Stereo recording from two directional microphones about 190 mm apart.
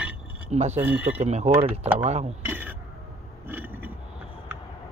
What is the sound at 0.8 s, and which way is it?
Speech, 10° right (ahead or behind).